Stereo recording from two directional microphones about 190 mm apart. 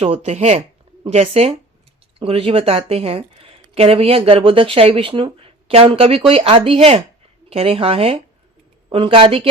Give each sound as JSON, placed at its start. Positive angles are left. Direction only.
{"t": 0.0, "sound": "a woman's voice", "side_deg": -30}